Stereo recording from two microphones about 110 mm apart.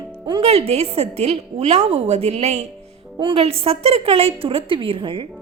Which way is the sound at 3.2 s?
60° right (ahead or behind).